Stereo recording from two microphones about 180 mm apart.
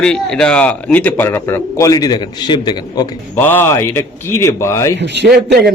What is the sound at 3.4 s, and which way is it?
A man's voice, 10° left (ahead or behind).